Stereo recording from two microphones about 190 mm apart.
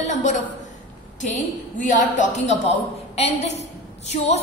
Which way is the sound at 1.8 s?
45° left (ahead or behind).